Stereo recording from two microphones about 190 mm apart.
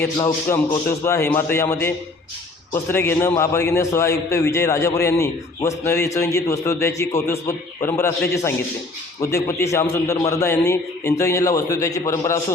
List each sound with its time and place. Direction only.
0.2 s a man's voice: 20° left (ahead or behind)